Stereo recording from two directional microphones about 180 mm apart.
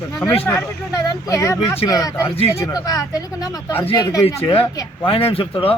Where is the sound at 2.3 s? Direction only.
35° left (ahead or behind).